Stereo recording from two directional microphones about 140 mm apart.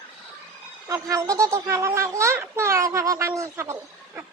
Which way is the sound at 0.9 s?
20° right (ahead or behind).